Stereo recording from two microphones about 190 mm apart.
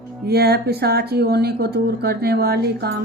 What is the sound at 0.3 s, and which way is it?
Speech, 55° right (ahead or behind).